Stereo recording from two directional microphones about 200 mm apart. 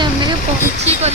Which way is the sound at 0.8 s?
35° right (ahead or behind).